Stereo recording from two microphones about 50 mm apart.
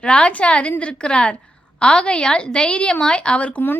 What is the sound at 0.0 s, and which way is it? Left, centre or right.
A woman's voice, left.